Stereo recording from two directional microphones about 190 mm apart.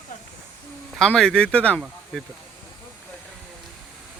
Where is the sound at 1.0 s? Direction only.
5° left (ahead or behind).